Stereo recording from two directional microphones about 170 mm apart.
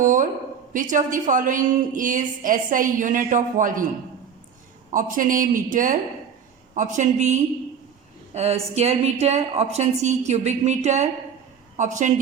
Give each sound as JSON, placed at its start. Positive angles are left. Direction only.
{"t": 0.0, "sound": "a sound", "side_deg": -50}
{"t": 0.7, "sound": "a woman's voice", "side_deg": -50}
{"t": 4.9, "sound": "a woman's voice", "side_deg": -50}